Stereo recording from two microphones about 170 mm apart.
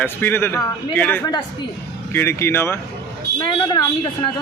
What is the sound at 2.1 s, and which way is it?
A man's voice, 15° left (ahead or behind).